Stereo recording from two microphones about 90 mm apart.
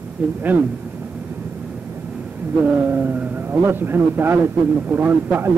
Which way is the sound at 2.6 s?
20° right (ahead or behind).